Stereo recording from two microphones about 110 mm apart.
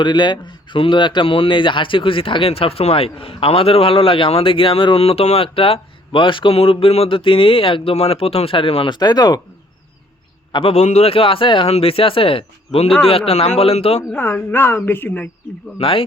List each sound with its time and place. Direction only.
0.0 s speech: 45° left (ahead or behind)
9.0 s speech: 35° left (ahead or behind)
10.5 s speech: 60° left (ahead or behind)
11.7 s speech: 60° left (ahead or behind)
14.2 s speech: 20° left (ahead or behind)
15.8 s speech: 55° left (ahead or behind)